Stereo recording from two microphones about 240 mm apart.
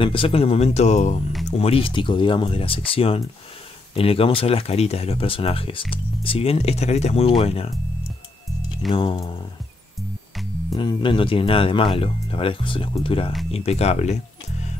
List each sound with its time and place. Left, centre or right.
0.0 s speech: left
8.9 s speech: left
10.7 s speech: centre